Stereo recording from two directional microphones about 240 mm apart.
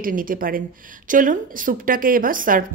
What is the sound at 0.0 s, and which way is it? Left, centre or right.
A woman's voice, right.